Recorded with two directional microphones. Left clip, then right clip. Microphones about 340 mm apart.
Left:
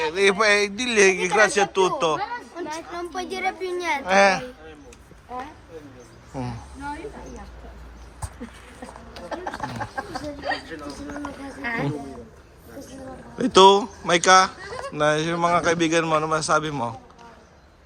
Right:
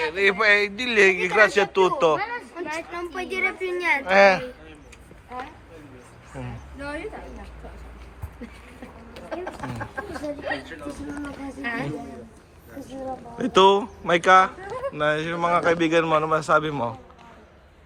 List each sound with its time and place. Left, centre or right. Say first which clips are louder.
0.0 s a man's voice: left 1 dB; centre
9.3 s speech: left 2 dB; left
11.6 s a woman's voice: left 2 dB; centre
13.4 s a man's voice: left 3 dB; centre